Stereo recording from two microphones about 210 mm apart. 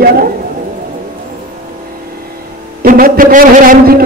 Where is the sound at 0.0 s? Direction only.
45° right (ahead or behind).